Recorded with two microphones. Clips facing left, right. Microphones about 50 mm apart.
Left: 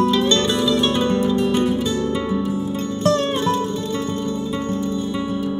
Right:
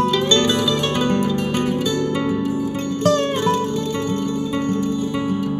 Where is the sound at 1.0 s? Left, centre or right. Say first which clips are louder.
Left 1 dB; right.